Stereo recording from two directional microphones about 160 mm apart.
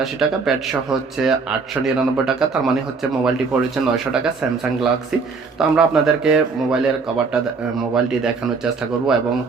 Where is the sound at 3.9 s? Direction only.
5° right (ahead or behind).